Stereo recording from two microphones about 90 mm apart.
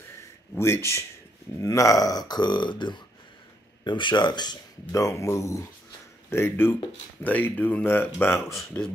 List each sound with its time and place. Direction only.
0.6 s speech: 30° left (ahead or behind); by 4.6 s 55° left (ahead or behind)
4.9 s speech: 35° left (ahead or behind)